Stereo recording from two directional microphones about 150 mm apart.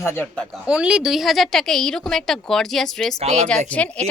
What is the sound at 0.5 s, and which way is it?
Speech, 5° right (ahead or behind).